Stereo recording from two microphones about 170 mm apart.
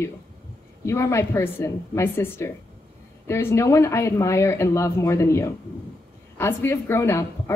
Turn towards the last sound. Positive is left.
turn(degrees=15)  # may be behind; listen again after turning